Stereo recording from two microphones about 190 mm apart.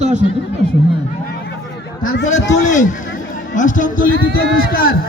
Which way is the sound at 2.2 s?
40° left (ahead or behind).